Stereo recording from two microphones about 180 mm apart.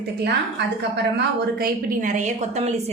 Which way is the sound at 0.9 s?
65° right (ahead or behind).